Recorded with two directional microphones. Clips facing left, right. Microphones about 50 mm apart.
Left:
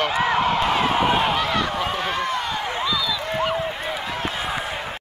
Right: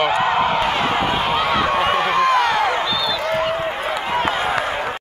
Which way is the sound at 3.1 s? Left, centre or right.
Right.